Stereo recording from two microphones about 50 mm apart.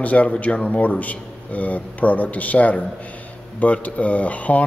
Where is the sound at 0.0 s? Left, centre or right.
Left.